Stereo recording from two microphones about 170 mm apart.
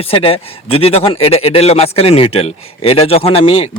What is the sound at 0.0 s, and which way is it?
A man's voice, 35° left (ahead or behind).